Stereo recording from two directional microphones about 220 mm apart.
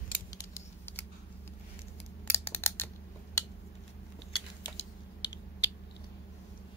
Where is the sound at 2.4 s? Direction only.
10° left (ahead or behind).